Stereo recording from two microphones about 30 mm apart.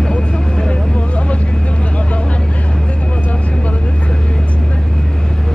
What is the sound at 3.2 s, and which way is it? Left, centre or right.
Vehicle, left.